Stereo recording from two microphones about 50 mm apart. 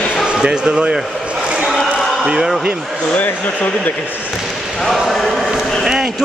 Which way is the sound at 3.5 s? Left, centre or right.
Left.